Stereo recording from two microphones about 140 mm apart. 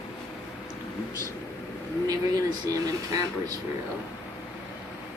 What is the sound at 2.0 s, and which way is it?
Speech, 25° right (ahead or behind).